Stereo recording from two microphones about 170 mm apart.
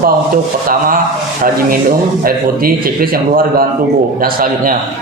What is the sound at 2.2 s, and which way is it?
A man's voice, 60° right (ahead or behind).